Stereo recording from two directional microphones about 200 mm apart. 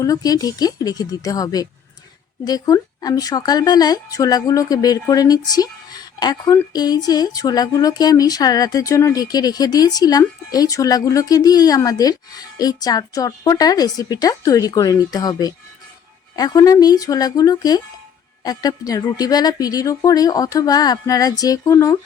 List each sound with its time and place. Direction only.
0.0 s speech: 15° left (ahead or behind)